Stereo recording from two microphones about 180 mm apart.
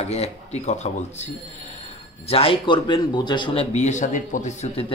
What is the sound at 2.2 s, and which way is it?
A man's voice, 30° left (ahead or behind).